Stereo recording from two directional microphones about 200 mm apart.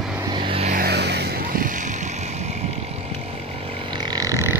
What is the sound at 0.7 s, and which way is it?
Vehicle, 50° right (ahead or behind).